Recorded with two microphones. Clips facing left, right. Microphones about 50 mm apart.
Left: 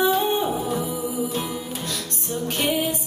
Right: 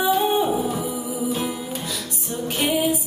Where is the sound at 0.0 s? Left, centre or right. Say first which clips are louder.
Right 1 dB; centre.